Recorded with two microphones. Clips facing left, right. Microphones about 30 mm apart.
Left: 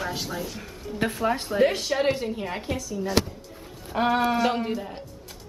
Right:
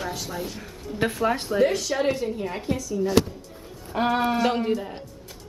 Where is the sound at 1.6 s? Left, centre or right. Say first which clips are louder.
Even; left.